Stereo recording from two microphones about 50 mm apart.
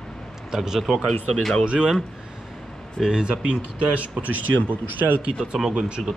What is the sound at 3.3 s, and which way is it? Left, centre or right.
Speech, right.